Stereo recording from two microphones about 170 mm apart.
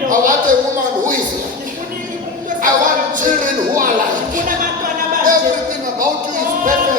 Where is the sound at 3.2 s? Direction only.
50° right (ahead or behind).